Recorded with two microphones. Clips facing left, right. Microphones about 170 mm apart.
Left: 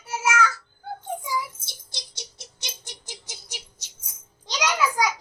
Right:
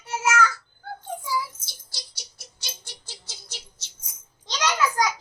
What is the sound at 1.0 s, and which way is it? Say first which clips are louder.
Music: even; 20° left (ahead or behind).